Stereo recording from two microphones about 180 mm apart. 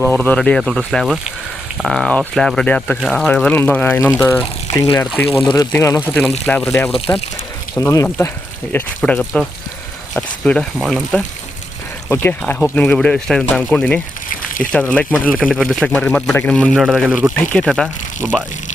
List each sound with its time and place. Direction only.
0.0 s speech: 10° left (ahead or behind)
4.7 s speech: 20° left (ahead or behind); by 11.2 s centre (ahead or behind)
12.0 s speech: 10° left (ahead or behind)
18.2 s speech: 10° right (ahead or behind)